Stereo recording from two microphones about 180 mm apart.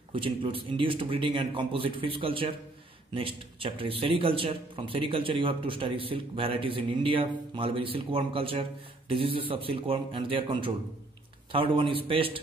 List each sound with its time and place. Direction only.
0.1 s speech: 30° right (ahead or behind)